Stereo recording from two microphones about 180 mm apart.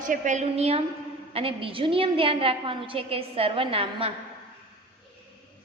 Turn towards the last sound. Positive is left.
turn(degrees=-30)  # may be behind; listen again after turning